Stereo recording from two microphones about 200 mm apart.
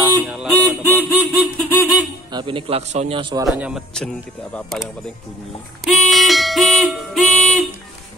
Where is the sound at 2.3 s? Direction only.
25° right (ahead or behind).